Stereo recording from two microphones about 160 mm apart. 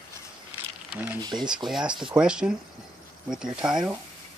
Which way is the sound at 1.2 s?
25° right (ahead or behind).